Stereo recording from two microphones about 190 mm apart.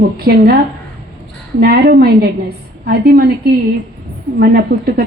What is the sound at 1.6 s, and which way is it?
A woman's voice, 55° right (ahead or behind).